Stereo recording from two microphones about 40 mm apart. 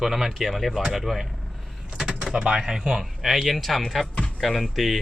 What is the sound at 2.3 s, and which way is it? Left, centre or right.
Speech, centre.